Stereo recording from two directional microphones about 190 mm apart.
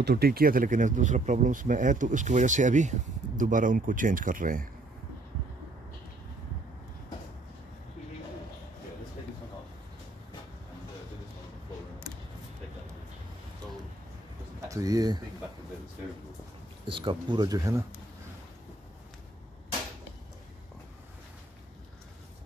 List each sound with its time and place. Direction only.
0.0 s speech: 55° right (ahead or behind)
14.7 s speech: 20° right (ahead or behind)
16.8 s speech: 25° right (ahead or behind)